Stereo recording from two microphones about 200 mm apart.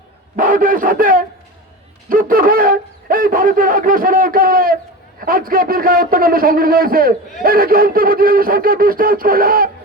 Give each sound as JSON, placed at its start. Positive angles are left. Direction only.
{"t": 0.3, "sound": "speech", "side_deg": -45}